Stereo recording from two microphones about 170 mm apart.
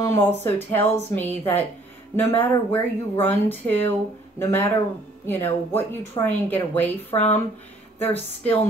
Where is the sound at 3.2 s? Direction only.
10° left (ahead or behind).